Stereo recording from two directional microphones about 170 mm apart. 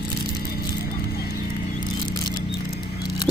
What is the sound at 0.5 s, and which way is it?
Clip-clop, 65° left (ahead or behind).